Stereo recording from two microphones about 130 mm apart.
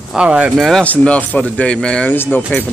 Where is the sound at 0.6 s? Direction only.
5° left (ahead or behind).